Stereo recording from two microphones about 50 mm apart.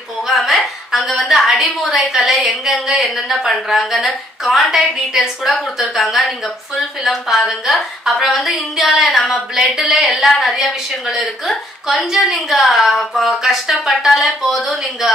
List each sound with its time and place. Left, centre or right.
0.3 s a woman's voice: centre